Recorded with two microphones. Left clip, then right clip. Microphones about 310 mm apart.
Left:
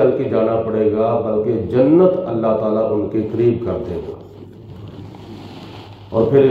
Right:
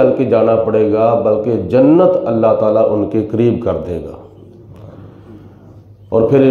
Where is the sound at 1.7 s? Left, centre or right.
Right.